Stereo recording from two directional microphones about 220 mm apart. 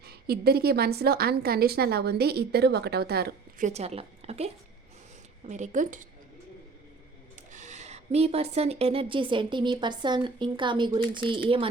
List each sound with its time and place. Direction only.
0.0 s a woman's voice: 45° right (ahead or behind)
3.7 s a woman's voice: 30° right (ahead or behind)
7.5 s a woman's voice: 30° right (ahead or behind)